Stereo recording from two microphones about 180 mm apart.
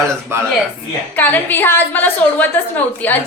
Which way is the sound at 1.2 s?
10° left (ahead or behind).